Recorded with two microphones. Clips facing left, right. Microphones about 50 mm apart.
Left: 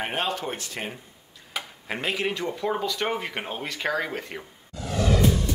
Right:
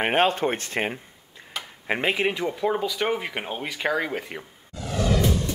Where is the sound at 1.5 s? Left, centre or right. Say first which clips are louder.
Left 1 dB; centre.